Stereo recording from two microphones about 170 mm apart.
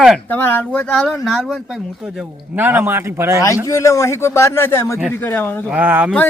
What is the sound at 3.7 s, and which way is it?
A man's voice, 15° left (ahead or behind).